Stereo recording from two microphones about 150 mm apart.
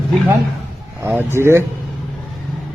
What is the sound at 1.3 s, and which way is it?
Speech, 15° right (ahead or behind).